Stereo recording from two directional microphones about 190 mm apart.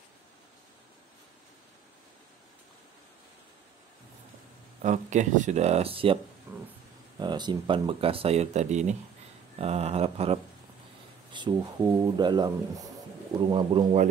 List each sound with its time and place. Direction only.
4.8 s speech: 40° right (ahead or behind)
6.5 s a sound: 10° right (ahead or behind)
7.2 s speech: 25° right (ahead or behind)